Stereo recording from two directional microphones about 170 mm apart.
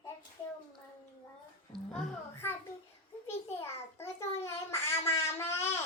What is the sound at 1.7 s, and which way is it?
Speech, centre (ahead or behind).